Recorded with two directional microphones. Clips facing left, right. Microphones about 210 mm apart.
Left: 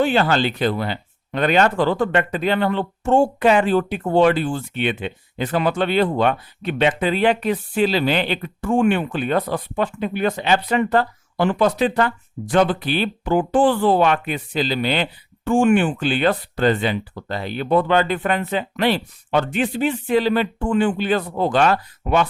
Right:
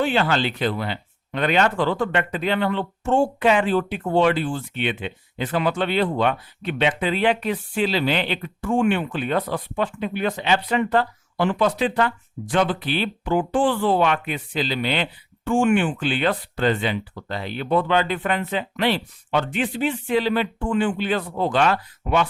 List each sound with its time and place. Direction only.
0.0 s speech: 40° left (ahead or behind)